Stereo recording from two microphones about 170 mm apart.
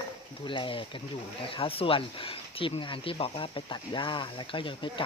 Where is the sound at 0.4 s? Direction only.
30° left (ahead or behind).